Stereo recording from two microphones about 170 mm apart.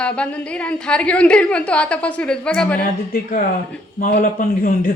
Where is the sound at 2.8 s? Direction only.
55° left (ahead or behind).